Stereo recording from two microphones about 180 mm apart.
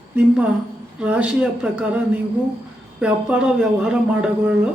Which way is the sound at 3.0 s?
5° right (ahead or behind).